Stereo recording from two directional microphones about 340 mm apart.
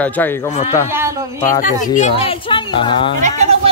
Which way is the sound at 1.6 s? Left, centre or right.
Left.